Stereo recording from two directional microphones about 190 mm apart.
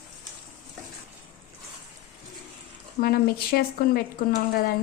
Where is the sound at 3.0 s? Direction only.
55° left (ahead or behind).